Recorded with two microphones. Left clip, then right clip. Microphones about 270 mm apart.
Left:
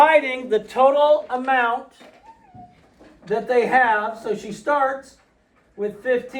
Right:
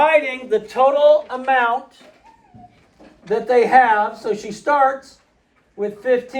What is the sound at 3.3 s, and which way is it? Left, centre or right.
Speech, centre.